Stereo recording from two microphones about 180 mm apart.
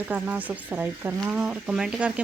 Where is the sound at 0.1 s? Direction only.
10° right (ahead or behind).